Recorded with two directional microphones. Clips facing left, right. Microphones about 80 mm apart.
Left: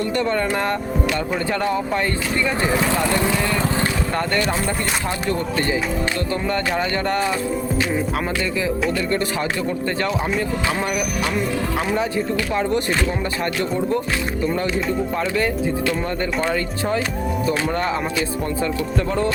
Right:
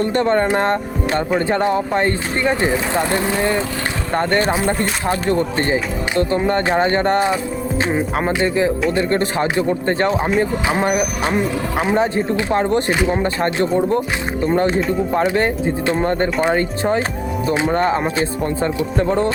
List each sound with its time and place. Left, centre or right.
0.0 s speech: right
17.7 s speech: right